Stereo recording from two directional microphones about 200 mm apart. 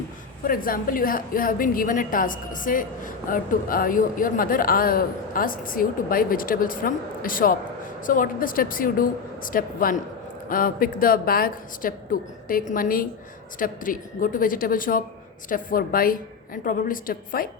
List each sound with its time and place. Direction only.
0.4 s a woman's voice: 45° left (ahead or behind)